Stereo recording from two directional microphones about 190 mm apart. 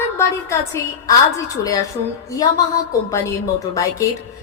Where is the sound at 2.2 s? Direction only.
20° left (ahead or behind).